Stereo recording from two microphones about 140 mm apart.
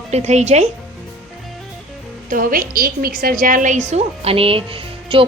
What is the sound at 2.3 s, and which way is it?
A woman's voice, 85° right.